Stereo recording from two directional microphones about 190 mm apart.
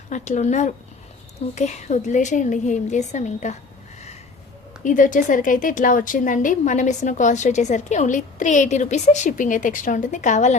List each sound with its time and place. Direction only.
0.1 s a woman's voice: 40° left (ahead or behind)
4.8 s a woman's voice: 45° left (ahead or behind)